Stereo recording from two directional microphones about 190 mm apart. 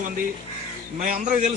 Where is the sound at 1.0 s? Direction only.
40° right (ahead or behind).